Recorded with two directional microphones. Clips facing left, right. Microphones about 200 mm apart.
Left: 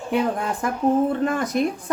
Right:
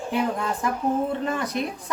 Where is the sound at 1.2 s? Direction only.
50° left (ahead or behind).